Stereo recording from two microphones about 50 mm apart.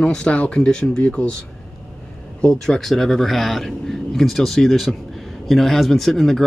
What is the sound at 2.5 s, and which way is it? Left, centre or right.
A man's voice, centre.